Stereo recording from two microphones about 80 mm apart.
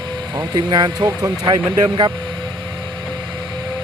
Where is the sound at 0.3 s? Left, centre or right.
Right.